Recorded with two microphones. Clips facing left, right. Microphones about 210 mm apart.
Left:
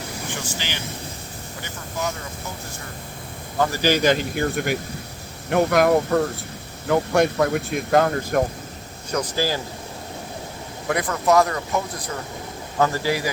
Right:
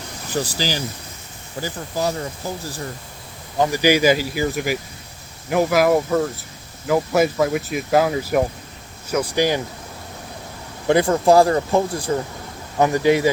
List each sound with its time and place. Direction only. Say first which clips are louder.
0.3 s speech: right 10 dB; 35° right (ahead or behind)
3.6 s speech: right 3 dB; 15° right (ahead or behind)
10.8 s speech: right 6 dB; 30° right (ahead or behind)
12.8 s speech: right 6 dB; 20° right (ahead or behind)